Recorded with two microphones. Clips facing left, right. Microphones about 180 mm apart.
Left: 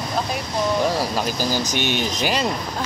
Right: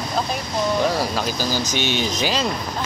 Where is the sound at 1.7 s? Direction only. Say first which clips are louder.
Even; 50° left (ahead or behind).